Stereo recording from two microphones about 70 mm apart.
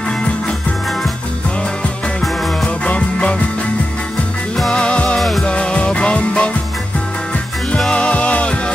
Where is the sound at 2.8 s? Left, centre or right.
Centre.